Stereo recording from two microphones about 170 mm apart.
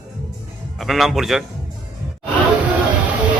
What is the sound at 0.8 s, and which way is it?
Speech, centre (ahead or behind).